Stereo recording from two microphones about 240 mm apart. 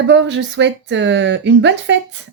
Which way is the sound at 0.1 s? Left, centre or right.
Right.